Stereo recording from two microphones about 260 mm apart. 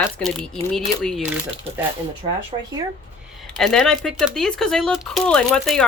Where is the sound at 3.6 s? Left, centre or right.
Centre.